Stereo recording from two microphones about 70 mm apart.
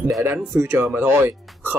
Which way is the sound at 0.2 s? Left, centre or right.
Right.